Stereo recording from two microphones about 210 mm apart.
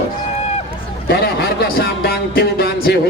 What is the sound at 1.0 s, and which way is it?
A man's voice, 50° left (ahead or behind).